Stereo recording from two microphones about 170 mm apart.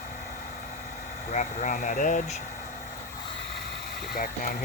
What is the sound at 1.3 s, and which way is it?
Speech, 45° left (ahead or behind).